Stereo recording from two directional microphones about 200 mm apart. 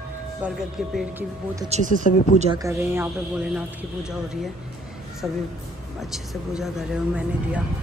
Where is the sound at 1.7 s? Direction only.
35° right (ahead or behind).